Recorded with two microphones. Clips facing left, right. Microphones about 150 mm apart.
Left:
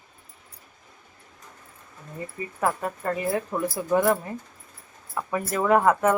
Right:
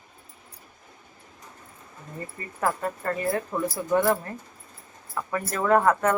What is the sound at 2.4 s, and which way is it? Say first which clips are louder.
Speech: left 1 dB; 10° left (ahead or behind).